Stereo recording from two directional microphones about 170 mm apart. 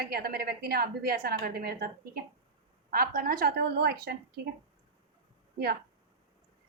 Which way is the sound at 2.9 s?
60° right (ahead or behind).